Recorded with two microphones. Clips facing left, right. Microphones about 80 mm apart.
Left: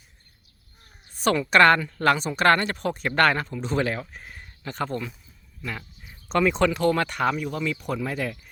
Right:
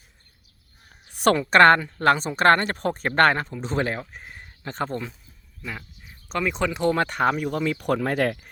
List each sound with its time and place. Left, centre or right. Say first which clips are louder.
1.1 s a sound: right 3 dB; right
1.4 s speech: right 2 dB; right
6.2 s speech: left 4 dB; centre
6.7 s speech: right 1 dB; right
7.9 s speech: right 6 dB; right